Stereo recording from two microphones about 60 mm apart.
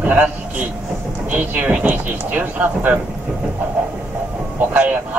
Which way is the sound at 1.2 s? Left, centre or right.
Right.